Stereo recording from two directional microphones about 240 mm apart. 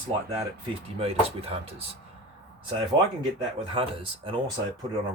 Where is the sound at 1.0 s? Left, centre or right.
Right.